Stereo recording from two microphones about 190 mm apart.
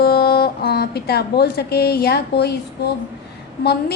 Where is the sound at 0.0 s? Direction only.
55° left (ahead or behind).